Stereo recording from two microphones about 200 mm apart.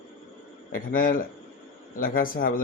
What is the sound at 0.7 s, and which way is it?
A man's voice, 45° left (ahead or behind).